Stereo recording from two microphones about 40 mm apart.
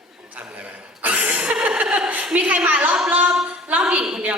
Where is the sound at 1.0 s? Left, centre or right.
Right.